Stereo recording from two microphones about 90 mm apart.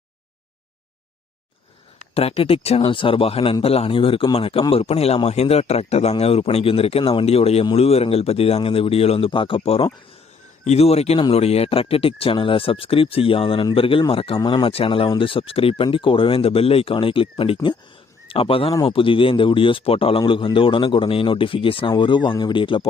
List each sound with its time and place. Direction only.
2.4 s speech: 90° left
11.2 s speech: 90° left
14.1 s speech: 90° left
14.4 s speech: 65° left (ahead or behind)
18.3 s speech: 90° left
18.9 s speech: 75° left (ahead or behind)